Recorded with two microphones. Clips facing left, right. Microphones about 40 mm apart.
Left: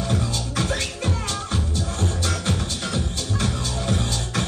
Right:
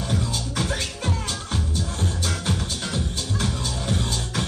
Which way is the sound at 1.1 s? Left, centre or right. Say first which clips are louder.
Left 2 dB; centre.